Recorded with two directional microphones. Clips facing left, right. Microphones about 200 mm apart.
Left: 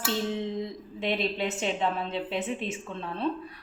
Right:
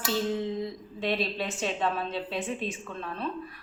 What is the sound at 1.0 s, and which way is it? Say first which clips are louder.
A woman's voice: left 1 dB; 20° left (ahead or behind).